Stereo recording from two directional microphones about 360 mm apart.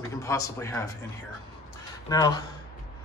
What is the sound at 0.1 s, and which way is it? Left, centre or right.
Speech, centre.